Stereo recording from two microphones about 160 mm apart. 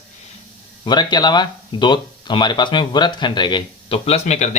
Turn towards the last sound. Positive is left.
turn(degrees=45)  # may be behind; listen again after turning